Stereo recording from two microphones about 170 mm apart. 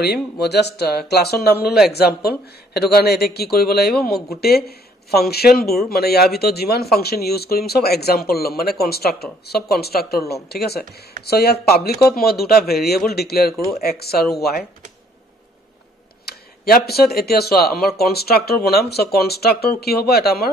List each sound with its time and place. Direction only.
0.0 s speech: 75° left (ahead or behind)
13.5 s speech: centre (ahead or behind)
13.7 s speech: 65° left (ahead or behind)
16.3 s speech: 65° left (ahead or behind)